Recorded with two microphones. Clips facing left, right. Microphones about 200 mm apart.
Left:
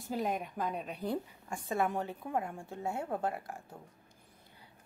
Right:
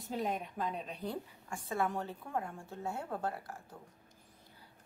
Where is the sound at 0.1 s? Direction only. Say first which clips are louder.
Left 2 dB; 5° left (ahead or behind).